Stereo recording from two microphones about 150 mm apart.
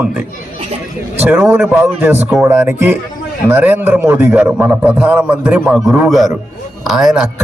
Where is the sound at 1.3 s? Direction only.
10° right (ahead or behind).